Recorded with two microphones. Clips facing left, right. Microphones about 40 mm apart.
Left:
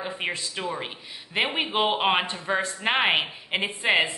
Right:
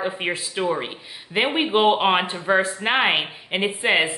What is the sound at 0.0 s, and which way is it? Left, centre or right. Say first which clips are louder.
Speech: right 5 dB; centre.